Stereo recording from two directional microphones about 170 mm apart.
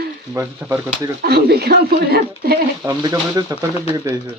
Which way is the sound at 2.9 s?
20° right (ahead or behind).